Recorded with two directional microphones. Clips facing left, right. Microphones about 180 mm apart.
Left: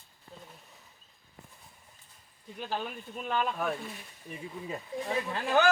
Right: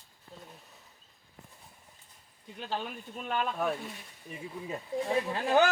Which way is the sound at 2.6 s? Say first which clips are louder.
Left 1 dB; 5° left (ahead or behind).